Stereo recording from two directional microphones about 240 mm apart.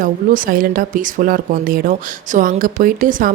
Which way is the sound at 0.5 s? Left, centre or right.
Right.